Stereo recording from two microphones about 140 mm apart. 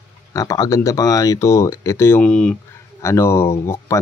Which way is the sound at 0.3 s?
25° left (ahead or behind).